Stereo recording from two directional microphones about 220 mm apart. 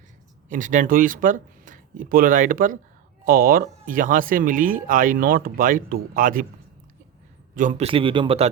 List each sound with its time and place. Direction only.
0.4 s speech: 35° right (ahead or behind)
7.5 s a man's voice: 35° right (ahead or behind)